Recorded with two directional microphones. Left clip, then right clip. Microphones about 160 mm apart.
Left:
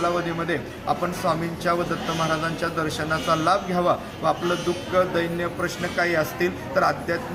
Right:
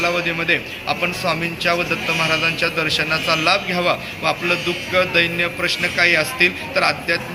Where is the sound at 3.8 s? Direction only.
10° left (ahead or behind).